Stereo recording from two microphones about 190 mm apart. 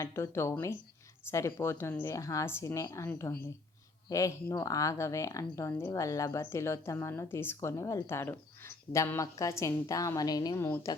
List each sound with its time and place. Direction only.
0.0 s speech: 15° left (ahead or behind)